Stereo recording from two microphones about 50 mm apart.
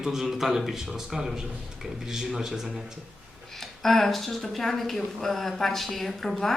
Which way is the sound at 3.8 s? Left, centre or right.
Centre.